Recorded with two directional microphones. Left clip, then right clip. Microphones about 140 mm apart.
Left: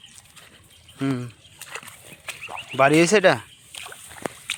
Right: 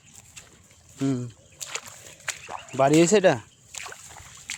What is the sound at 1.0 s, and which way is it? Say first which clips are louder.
Speech: left 1 dB; 15° right (ahead or behind).